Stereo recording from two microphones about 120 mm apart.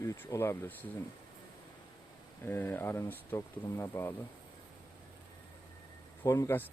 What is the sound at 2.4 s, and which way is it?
Speech, 15° left (ahead or behind).